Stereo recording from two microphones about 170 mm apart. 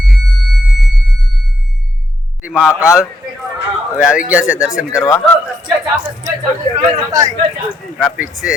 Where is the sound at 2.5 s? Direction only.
5° right (ahead or behind).